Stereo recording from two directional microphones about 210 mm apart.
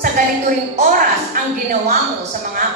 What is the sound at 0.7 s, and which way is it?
Speech, 40° right (ahead or behind).